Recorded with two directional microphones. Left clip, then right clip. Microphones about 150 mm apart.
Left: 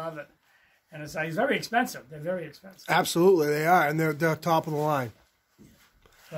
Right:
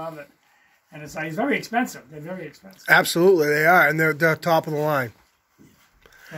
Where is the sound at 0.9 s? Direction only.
45° left (ahead or behind).